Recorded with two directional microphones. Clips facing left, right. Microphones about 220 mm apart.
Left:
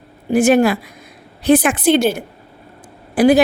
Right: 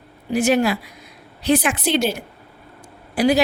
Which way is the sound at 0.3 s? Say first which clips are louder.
Left 5 dB; 50° left (ahead or behind).